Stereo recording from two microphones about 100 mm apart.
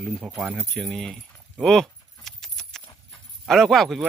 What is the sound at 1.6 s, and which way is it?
Keys jangling, 5° left (ahead or behind).